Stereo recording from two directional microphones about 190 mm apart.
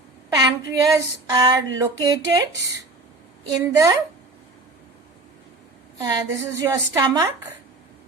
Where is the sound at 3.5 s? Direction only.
20° right (ahead or behind).